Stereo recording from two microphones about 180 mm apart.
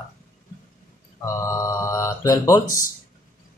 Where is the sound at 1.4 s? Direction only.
15° left (ahead or behind).